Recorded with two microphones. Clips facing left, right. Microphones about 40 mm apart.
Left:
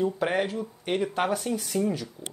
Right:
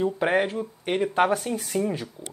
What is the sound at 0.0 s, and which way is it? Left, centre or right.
Speech, right.